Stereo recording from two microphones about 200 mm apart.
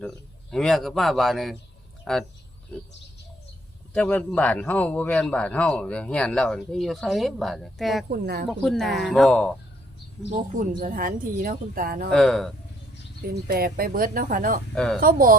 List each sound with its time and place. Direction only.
0.5 s a man's voice: centre (ahead or behind)
3.9 s a man's voice: 5° left (ahead or behind)
8.1 s speech: 55° right (ahead or behind)
8.4 s a man's voice: centre (ahead or behind)
10.3 s speech: 40° right (ahead or behind)
12.1 s a man's voice: centre (ahead or behind)
13.5 s speech: 50° right (ahead or behind)